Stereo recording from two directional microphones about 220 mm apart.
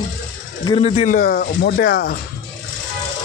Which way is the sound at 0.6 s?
25° left (ahead or behind).